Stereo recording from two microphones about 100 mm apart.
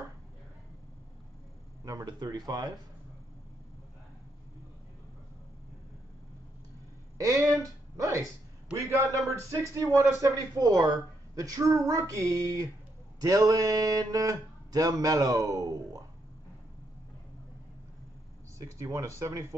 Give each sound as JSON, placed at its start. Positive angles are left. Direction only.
{"t": 1.9, "sound": "speech", "side_deg": -35}
{"t": 7.2, "sound": "speech", "side_deg": -35}
{"t": 18.6, "sound": "speech", "side_deg": -30}